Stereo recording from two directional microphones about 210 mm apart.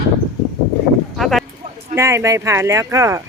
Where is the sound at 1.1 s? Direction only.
Centre (ahead or behind).